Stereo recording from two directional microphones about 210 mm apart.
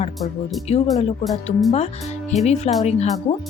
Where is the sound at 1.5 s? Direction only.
30° left (ahead or behind).